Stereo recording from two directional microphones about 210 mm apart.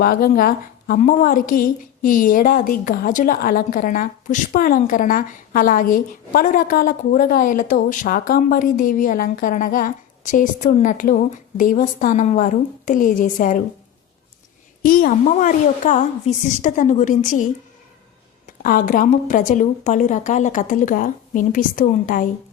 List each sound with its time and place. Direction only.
0.0 s a woman's voice: 45° left (ahead or behind)
14.8 s a woman's voice: 40° left (ahead or behind)